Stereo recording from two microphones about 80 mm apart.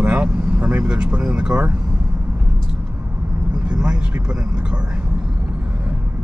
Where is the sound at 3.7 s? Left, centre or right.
Centre.